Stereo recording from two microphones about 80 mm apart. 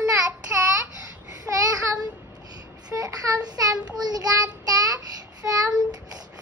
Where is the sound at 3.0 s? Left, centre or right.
Right.